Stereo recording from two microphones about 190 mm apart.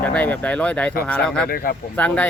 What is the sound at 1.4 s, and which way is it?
Speech, 50° left (ahead or behind).